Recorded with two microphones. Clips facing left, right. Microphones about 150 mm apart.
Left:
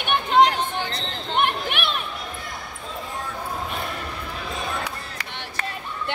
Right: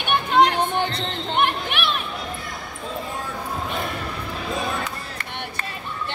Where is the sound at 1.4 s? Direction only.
50° left (ahead or behind).